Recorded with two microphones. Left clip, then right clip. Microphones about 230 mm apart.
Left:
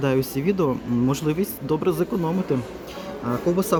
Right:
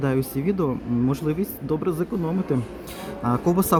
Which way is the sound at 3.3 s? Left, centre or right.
Centre.